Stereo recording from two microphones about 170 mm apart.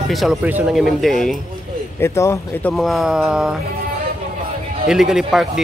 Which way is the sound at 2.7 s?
Centre (ahead or behind).